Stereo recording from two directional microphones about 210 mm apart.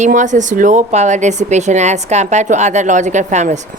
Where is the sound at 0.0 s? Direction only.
35° right (ahead or behind).